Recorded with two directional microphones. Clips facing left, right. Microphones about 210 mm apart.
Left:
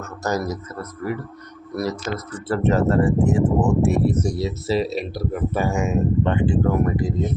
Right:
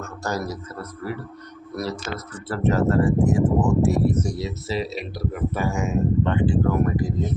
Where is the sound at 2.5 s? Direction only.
25° left (ahead or behind).